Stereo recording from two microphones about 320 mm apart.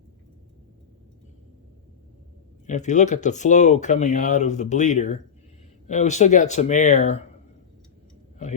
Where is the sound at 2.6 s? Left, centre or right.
Left.